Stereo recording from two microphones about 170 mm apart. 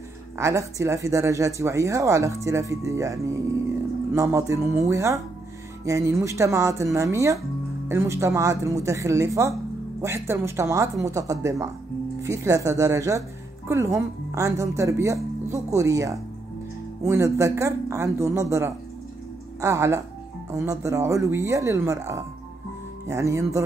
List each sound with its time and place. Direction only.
0.4 s speech: 15° right (ahead or behind)